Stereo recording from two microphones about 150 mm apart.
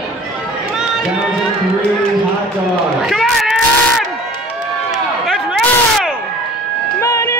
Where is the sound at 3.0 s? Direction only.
Centre (ahead or behind).